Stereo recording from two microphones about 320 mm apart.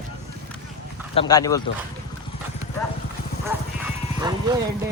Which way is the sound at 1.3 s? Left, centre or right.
Centre.